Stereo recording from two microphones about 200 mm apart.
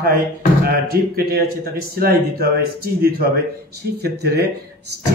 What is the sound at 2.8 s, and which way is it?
A man's voice, 50° right (ahead or behind).